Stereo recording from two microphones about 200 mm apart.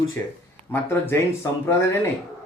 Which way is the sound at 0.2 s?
10° left (ahead or behind).